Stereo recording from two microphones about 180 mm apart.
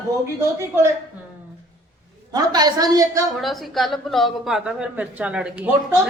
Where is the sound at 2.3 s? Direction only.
20° right (ahead or behind).